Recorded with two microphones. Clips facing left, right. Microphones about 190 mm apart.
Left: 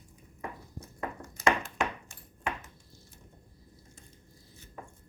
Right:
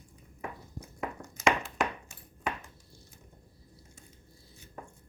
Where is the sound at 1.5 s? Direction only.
Centre (ahead or behind).